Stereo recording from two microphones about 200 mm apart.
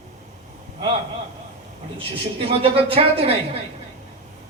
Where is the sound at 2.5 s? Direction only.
30° right (ahead or behind).